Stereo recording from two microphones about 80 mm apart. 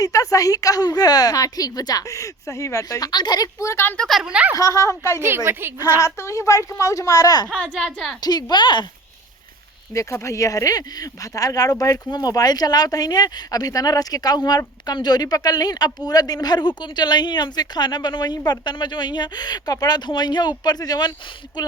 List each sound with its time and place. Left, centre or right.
0.0 s speech: left
3.1 s speech: left
3.6 s a woman's voice: left
3.9 s speech: centre
4.2 s speech: centre
4.5 s speech: left
5.5 s a woman's voice: right
6.0 s speech: left
7.5 s speech: centre
8.2 s speech: left
9.9 s speech: left